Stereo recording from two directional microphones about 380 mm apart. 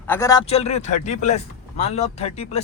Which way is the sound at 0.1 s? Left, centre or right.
Centre.